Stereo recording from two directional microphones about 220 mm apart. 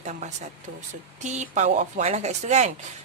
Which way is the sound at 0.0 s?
30° right (ahead or behind).